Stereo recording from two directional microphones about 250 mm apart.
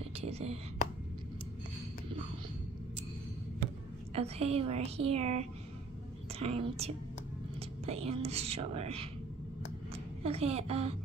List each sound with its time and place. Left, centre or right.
0.3 s a woman's voice: right
4.1 s a woman's voice: right
10.2 s a woman's voice: right